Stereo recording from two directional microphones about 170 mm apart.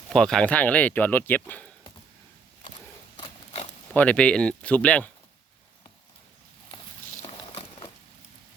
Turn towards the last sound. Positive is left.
turn(degrees=35)  # may be behind; listen again after turning